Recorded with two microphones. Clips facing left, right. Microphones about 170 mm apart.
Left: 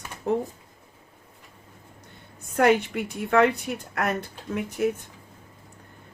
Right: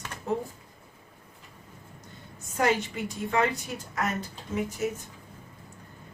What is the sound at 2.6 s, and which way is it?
A woman's voice, 60° left (ahead or behind).